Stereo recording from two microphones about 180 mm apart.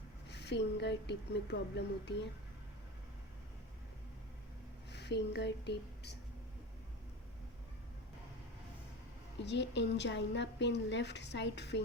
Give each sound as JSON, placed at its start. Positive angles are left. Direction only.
{"t": 0.3, "sound": "a woman's voice", "side_deg": 70}
{"t": 4.9, "sound": "a woman's voice", "side_deg": 70}
{"t": 9.4, "sound": "a woman's voice", "side_deg": 75}